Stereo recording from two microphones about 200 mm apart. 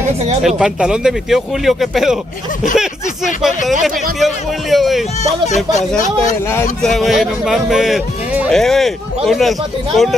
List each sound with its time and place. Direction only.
0.4 s speech: centre (ahead or behind)
5.2 s speech: 35° left (ahead or behind)
6.8 s speech: centre (ahead or behind)